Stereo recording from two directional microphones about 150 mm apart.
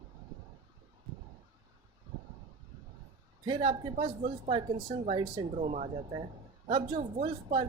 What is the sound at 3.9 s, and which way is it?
Speech, 45° right (ahead or behind).